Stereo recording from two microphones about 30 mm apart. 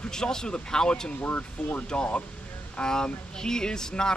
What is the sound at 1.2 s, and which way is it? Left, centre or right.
Speech, left.